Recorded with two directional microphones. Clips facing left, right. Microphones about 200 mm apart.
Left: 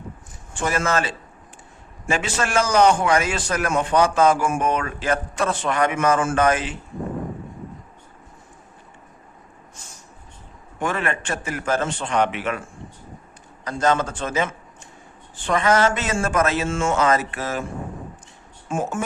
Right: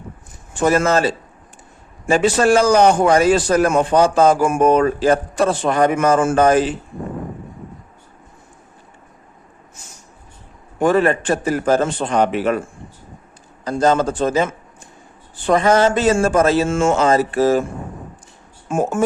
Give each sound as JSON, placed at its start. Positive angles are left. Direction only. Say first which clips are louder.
{"t": 0.5, "sound": "a man's voice", "louder": "right 7 dB", "side_deg": -40}
{"t": 10.8, "sound": "a man's voice", "louder": "right 10 dB", "side_deg": -35}
{"t": 13.7, "sound": "a man's voice", "louder": "right 5 dB", "side_deg": -35}
{"t": 16.6, "sound": "speech", "louder": "right 6 dB", "side_deg": -45}
{"t": 16.9, "sound": "a man's voice", "louder": "right 5 dB", "side_deg": -30}
{"t": 18.7, "sound": "speech", "louder": "right 6 dB", "side_deg": -45}